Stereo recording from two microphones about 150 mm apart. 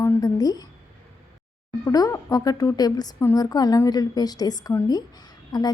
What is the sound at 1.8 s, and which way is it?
Speech, 25° left (ahead or behind).